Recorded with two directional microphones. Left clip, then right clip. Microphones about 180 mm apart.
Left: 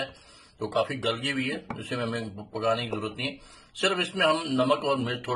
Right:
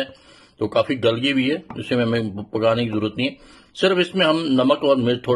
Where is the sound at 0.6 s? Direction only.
50° right (ahead or behind).